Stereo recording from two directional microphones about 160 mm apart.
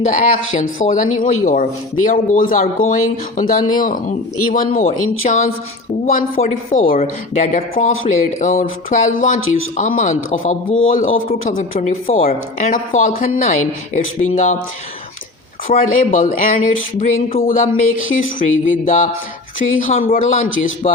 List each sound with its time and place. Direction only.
0.0 s speech: 50° left (ahead or behind)
12.0 s speech: 40° left (ahead or behind)
15.6 s speech: 60° left (ahead or behind)
20.8 s speech: 40° left (ahead or behind)